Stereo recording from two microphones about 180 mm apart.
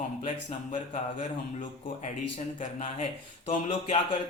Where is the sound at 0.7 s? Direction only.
45° left (ahead or behind).